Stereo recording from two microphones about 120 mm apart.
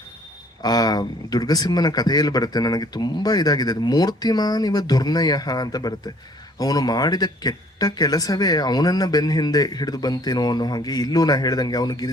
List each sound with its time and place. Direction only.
0.6 s speech: 35° left (ahead or behind)